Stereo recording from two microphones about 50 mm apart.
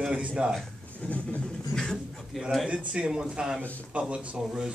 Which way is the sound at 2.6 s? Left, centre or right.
Right.